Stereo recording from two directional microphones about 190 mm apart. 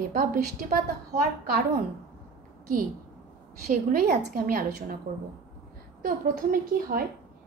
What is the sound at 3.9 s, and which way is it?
A woman's voice, 50° right (ahead or behind).